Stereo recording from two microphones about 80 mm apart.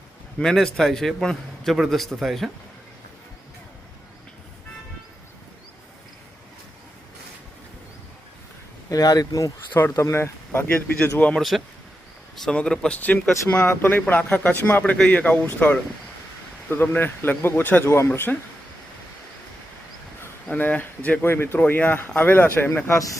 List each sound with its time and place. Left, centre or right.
0.3 s a man's voice: centre
8.9 s speech: left
9.9 s speech: left
10.8 s speech: centre
11.3 s a man's voice: centre
12.5 s speech: centre; by 18.3 s left
20.5 s speech: left